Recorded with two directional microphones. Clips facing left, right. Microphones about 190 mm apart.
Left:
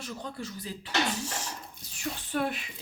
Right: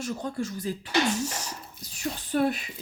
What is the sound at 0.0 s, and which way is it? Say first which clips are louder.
Speech: right 7 dB; 45° right (ahead or behind).